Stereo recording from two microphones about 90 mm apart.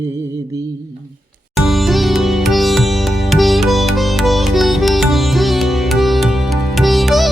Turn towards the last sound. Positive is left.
turn(degrees=0)  # may be behind; listen again after turning